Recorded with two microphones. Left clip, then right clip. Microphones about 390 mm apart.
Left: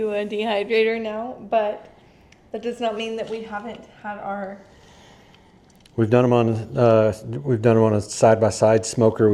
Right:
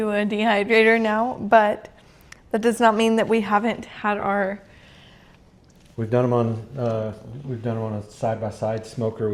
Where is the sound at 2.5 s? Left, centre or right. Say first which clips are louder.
Right 7 dB; right.